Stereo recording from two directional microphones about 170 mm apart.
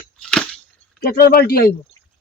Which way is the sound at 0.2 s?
5° left (ahead or behind).